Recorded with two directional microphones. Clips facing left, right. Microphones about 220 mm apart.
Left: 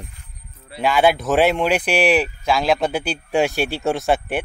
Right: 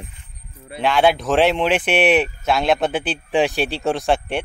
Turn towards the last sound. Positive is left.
turn(degrees=0)  # may be behind; listen again after turning